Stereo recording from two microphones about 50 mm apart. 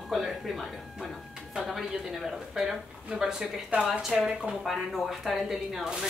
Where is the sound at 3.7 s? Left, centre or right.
Right.